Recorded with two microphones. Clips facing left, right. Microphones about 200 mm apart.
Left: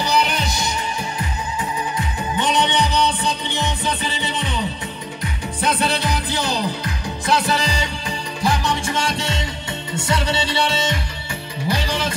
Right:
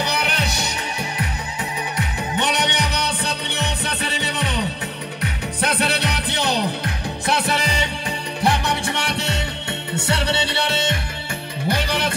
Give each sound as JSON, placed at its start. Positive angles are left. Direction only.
{"t": 0.0, "sound": "music", "side_deg": -60}